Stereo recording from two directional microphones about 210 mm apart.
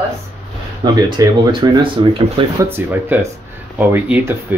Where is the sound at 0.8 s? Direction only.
20° right (ahead or behind).